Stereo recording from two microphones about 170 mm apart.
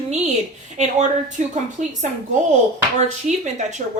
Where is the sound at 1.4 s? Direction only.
45° right (ahead or behind).